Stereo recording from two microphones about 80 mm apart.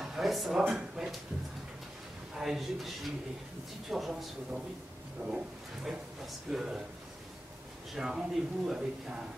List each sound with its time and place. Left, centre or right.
0.0 s a sound: centre
2.3 s speech: centre
5.2 s speech: centre
5.9 s speech: centre
7.9 s speech: centre